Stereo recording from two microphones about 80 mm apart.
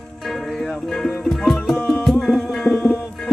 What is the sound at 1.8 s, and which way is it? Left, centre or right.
Music, left.